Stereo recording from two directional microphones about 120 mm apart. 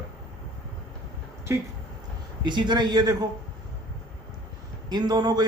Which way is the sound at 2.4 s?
40° right (ahead or behind).